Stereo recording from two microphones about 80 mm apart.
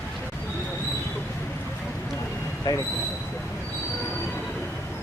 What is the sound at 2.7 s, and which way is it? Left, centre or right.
Speech, left.